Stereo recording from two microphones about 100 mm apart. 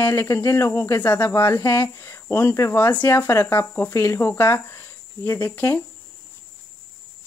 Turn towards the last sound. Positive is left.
turn(degrees=25)  # may be behind; listen again after turning